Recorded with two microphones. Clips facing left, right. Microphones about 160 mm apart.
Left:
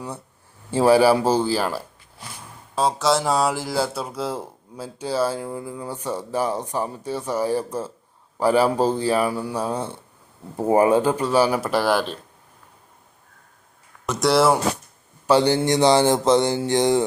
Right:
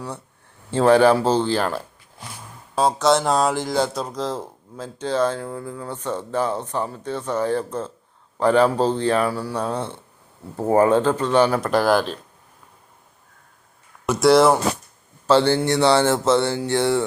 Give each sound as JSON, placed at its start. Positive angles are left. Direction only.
{"t": 0.7, "sound": "speech", "side_deg": 10}
{"t": 14.1, "sound": "speech", "side_deg": 0}
{"t": 15.3, "sound": "speech", "side_deg": 15}